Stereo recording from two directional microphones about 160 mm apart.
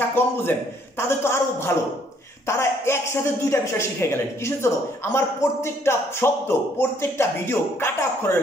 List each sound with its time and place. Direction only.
0.1 s speech: 15° left (ahead or behind)